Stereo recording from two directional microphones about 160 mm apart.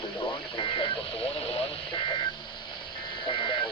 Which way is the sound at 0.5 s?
30° left (ahead or behind).